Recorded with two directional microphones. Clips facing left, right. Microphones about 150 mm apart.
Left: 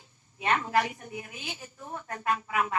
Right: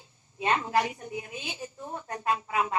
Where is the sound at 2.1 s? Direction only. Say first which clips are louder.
Right 1 dB; 20° right (ahead or behind).